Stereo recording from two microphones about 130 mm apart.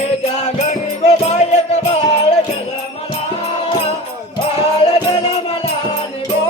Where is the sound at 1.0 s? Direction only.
55° left (ahead or behind).